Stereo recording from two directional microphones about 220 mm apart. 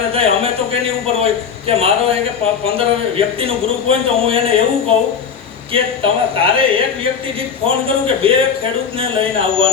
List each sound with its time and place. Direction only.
0.1 s a man's voice: 25° right (ahead or behind)
5.7 s a man's voice: 25° right (ahead or behind)